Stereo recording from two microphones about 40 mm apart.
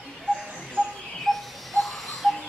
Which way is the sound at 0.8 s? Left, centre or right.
Right.